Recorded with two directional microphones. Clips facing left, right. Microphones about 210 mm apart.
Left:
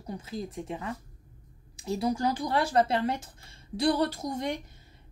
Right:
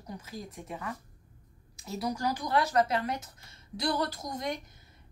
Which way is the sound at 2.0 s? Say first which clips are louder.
Left 3 dB; 25° left (ahead or behind).